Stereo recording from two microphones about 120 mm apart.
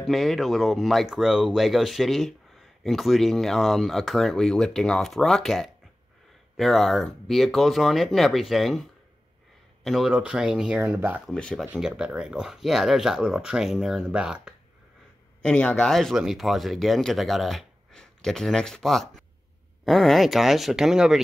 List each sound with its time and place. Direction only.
0.1 s speech: centre (ahead or behind)
9.8 s speech: centre (ahead or behind)
10.8 s speech: 15° right (ahead or behind)
11.2 s speech: 5° left (ahead or behind)
11.6 s speech: 15° right (ahead or behind)
15.4 s speech: 5° left (ahead or behind)